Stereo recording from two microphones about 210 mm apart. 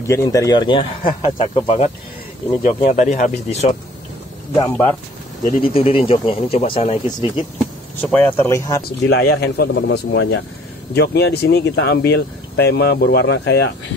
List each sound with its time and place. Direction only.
0.0 s speech: 15° left (ahead or behind)
2.6 s speech: 35° left (ahead or behind)
4.6 s speech: 10° left (ahead or behind)
5.6 s speech: 25° left (ahead or behind)
7.5 s speech: 10° left (ahead or behind)
9.0 s speech: 50° left (ahead or behind)